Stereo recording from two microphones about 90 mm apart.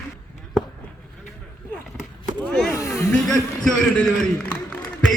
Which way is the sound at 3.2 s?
5° left (ahead or behind).